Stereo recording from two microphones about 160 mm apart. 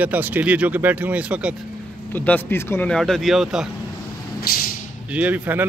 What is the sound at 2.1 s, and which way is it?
Speech, 10° left (ahead or behind).